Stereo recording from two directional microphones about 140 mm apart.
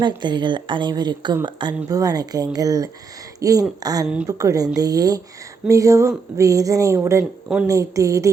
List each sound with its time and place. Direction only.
0.0 s speech: 35° right (ahead or behind)
4.0 s speech: 5° right (ahead or behind)
4.3 s speech: 25° right (ahead or behind)